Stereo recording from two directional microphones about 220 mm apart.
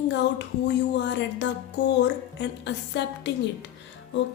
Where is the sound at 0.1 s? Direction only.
55° left (ahead or behind).